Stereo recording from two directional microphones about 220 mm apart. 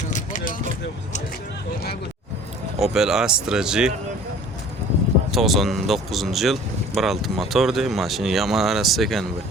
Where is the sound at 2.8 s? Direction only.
Centre (ahead or behind).